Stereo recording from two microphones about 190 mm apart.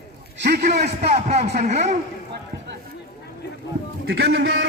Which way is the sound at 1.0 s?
35° right (ahead or behind).